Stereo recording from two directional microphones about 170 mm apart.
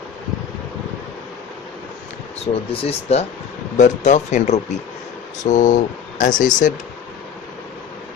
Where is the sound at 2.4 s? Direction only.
35° left (ahead or behind).